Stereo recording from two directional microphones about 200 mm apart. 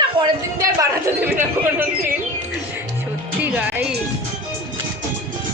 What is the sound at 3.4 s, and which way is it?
Music, 5° right (ahead or behind).